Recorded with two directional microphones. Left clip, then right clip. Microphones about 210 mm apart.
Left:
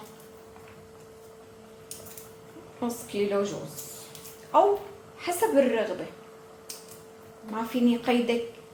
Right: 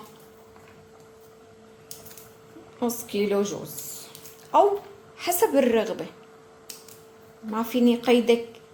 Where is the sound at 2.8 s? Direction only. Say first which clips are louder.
Right 3 dB; 50° right (ahead or behind).